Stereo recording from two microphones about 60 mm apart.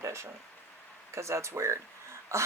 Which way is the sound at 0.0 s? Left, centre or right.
Right.